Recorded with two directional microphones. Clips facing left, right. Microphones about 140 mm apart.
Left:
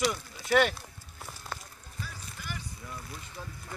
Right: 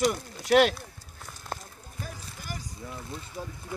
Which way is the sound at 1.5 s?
40° right (ahead or behind).